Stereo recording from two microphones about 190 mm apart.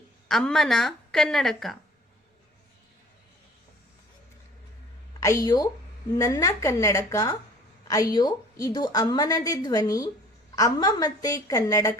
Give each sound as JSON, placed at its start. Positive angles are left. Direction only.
{"t": 0.3, "sound": "speech", "side_deg": 0}
{"t": 5.2, "sound": "a woman's voice", "side_deg": 15}